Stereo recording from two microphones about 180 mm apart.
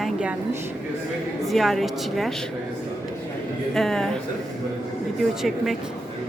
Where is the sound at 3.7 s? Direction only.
Centre (ahead or behind).